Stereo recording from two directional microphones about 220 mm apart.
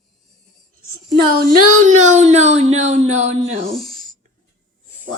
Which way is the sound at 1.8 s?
35° right (ahead or behind).